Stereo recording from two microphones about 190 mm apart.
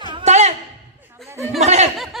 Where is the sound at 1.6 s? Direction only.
35° right (ahead or behind).